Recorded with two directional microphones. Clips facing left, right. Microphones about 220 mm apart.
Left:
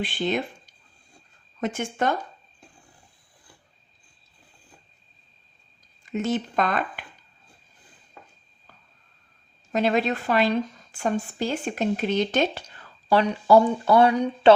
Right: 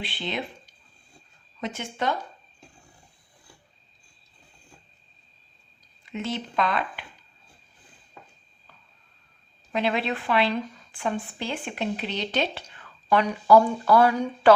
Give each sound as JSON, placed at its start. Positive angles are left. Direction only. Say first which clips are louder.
{"t": 0.0, "sound": "speech", "louder": "left 6 dB", "side_deg": 45}
{"t": 1.6, "sound": "speech", "louder": "left 3 dB", "side_deg": 50}
{"t": 6.1, "sound": "speech", "louder": "left 5 dB", "side_deg": 45}
{"t": 9.7, "sound": "speech", "louder": "left 4 dB", "side_deg": 45}